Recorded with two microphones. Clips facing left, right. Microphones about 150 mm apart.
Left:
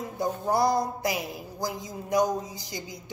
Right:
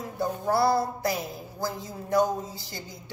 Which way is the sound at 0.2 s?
15° left (ahead or behind).